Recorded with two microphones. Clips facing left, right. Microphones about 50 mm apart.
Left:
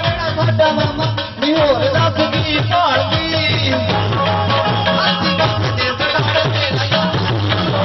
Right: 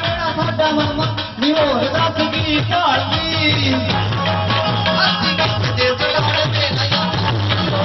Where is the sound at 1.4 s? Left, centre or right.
Centre.